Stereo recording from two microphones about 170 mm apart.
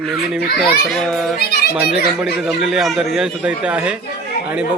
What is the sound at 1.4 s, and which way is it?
Speech, 65° left (ahead or behind).